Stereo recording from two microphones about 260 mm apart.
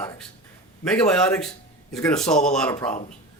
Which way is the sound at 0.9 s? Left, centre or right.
Centre.